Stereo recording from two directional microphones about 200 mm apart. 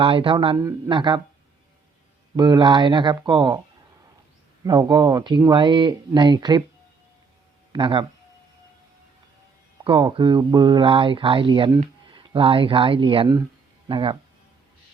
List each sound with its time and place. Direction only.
0.0 s speech: 25° right (ahead or behind)
2.3 s speech: 20° right (ahead or behind)
4.6 s speech: 20° right (ahead or behind)
7.7 s speech: 25° right (ahead or behind)
9.8 s speech: 25° right (ahead or behind)